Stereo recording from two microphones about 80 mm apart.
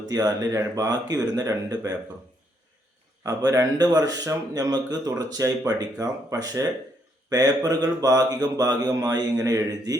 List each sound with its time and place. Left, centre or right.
0.1 s speech: right
3.2 s speech: right